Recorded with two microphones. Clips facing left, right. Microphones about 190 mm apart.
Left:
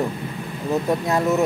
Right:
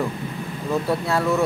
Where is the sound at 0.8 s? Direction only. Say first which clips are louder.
Left 2 dB; 20° left (ahead or behind).